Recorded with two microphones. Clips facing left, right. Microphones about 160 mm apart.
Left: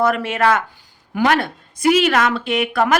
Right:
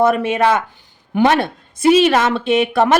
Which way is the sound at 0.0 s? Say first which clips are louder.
Right 3 dB; 20° right (ahead or behind).